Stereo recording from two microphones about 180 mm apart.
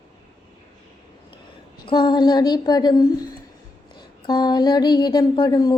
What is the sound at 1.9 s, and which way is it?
Female singing, 25° left (ahead or behind).